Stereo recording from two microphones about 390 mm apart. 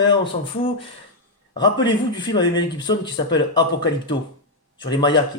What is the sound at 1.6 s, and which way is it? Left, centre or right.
Speech, centre.